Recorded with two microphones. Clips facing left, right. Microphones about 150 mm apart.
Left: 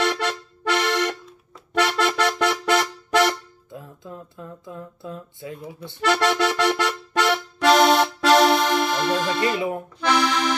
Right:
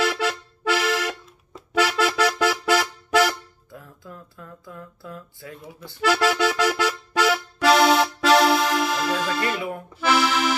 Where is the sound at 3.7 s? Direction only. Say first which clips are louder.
Left 4 dB; 25° left (ahead or behind).